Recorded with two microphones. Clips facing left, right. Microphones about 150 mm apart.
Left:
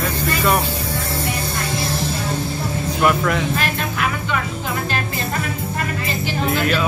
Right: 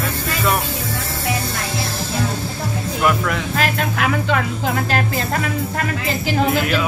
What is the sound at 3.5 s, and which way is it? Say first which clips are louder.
Speech: right 2 dB; 90° right.